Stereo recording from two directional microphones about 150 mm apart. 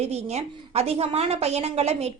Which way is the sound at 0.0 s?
45° right (ahead or behind).